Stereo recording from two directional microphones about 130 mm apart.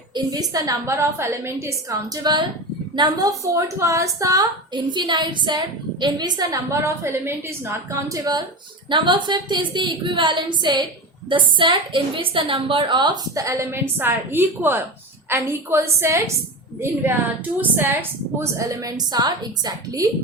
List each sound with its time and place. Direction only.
0.1 s a woman's voice: 30° right (ahead or behind)
8.1 s a woman's voice: 30° right (ahead or behind)